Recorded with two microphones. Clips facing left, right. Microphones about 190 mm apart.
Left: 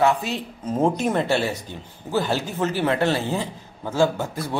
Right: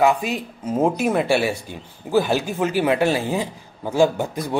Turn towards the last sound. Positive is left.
turn(degrees=-15)  # may be behind; listen again after turning